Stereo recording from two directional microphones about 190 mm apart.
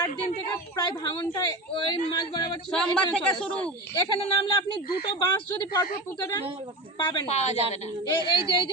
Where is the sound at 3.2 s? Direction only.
5° left (ahead or behind).